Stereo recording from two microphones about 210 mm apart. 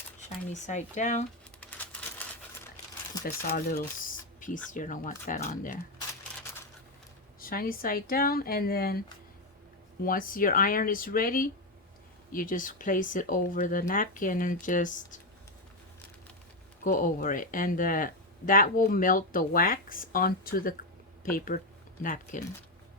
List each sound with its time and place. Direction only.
0.5 s speech: 35° left (ahead or behind)
1.6 s a sound: 5° left (ahead or behind)
3.2 s speech: 45° left (ahead or behind)
7.3 s speech: 45° left (ahead or behind)
16.8 s speech: 40° left (ahead or behind)